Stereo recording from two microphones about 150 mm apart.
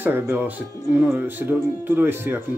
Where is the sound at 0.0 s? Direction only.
15° right (ahead or behind).